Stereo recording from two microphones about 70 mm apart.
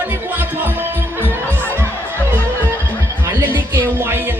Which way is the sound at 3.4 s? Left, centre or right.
Right.